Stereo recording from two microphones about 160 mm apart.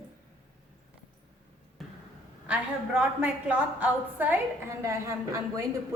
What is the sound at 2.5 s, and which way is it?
A woman's voice, 5° right (ahead or behind).